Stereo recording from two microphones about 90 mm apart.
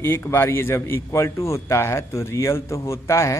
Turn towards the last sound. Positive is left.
turn(degrees=30)  # may be behind; listen again after turning